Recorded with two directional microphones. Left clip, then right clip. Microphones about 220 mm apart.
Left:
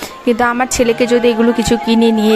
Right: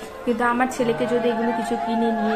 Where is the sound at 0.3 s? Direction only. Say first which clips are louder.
Left 7 dB; 45° left (ahead or behind).